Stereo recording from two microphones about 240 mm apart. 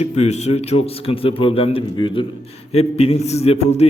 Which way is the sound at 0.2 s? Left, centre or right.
Left.